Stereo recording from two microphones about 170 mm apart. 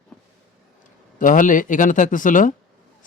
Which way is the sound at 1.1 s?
50° left (ahead or behind).